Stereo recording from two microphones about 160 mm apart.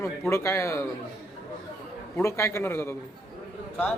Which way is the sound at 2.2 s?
20° left (ahead or behind).